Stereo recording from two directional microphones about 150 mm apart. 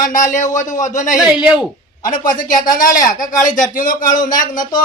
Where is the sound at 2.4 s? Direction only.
65° left (ahead or behind).